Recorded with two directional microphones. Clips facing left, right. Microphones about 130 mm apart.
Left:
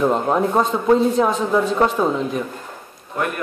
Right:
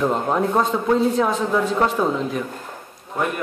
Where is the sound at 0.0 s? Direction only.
10° left (ahead or behind).